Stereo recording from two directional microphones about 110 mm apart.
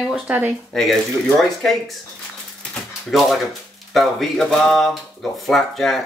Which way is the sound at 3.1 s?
Centre (ahead or behind).